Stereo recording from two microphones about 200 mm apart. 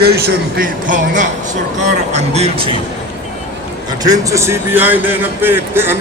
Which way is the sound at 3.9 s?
20° right (ahead or behind).